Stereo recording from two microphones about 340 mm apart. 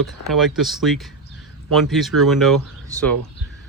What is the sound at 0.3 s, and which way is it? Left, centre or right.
Speech, centre.